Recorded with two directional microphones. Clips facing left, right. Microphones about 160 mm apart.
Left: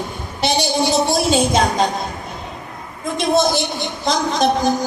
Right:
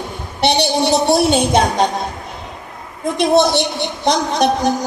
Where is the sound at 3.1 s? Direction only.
65° right (ahead or behind).